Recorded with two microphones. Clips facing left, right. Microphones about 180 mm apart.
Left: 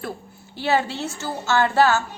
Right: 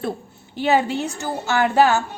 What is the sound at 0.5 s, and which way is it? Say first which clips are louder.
A woman's voice: right 3 dB; 15° right (ahead or behind).